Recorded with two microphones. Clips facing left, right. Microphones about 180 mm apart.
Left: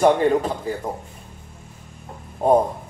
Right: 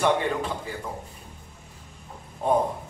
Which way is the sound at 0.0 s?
40° left (ahead or behind).